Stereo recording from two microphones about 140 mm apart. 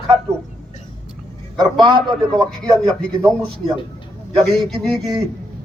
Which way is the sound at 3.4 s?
Centre (ahead or behind).